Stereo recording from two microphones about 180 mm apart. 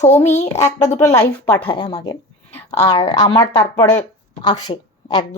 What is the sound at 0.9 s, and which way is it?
Speech, 15° left (ahead or behind).